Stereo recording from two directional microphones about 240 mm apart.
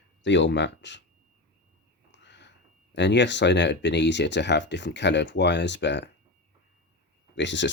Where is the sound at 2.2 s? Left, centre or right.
Left.